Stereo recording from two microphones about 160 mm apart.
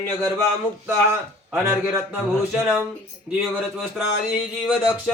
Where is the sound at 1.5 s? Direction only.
10° right (ahead or behind).